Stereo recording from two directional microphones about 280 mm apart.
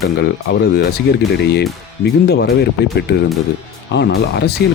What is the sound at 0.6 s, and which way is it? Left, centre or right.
Speech, left.